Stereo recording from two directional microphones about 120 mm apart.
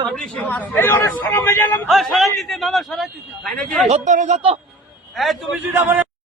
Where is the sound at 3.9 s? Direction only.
85° right.